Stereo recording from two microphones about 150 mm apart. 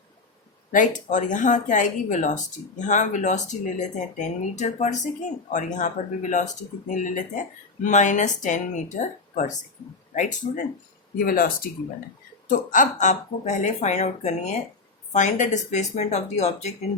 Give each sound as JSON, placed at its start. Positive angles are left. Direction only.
{"t": 0.7, "sound": "speech", "side_deg": 60}
{"t": 11.2, "sound": "speech", "side_deg": 70}